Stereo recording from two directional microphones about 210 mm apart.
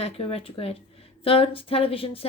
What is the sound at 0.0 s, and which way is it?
Speech, 25° left (ahead or behind).